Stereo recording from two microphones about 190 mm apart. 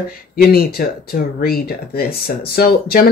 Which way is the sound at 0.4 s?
55° left (ahead or behind).